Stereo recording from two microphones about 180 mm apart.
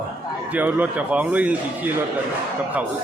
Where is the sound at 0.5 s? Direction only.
10° right (ahead or behind).